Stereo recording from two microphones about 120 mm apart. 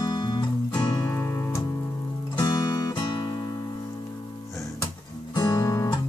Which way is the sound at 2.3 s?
35° left (ahead or behind).